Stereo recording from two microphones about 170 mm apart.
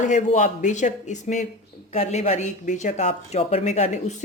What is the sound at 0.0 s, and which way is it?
Speech, 45° left (ahead or behind).